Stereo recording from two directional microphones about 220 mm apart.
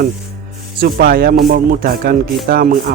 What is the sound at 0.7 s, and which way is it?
Speech, 40° right (ahead or behind).